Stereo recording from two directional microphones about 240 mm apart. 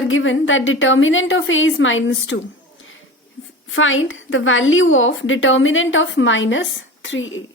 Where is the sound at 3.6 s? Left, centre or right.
Left.